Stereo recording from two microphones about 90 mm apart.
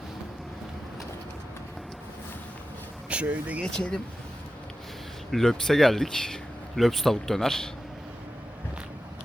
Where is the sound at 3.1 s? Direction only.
15° right (ahead or behind).